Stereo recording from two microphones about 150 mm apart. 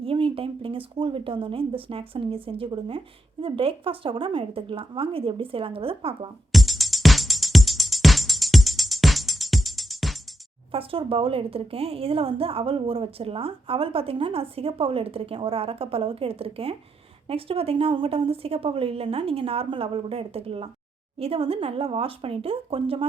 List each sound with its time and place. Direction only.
0.0 s speech: 35° right (ahead or behind)
6.5 s music: centre (ahead or behind)
10.7 s speech: 40° right (ahead or behind)